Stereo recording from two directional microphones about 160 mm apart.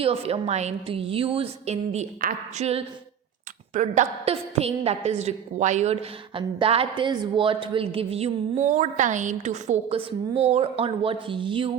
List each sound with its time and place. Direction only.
0.0 s a woman's voice: 35° right (ahead or behind)
8.6 s a woman's voice: 50° right (ahead or behind); by 11.7 s 30° right (ahead or behind)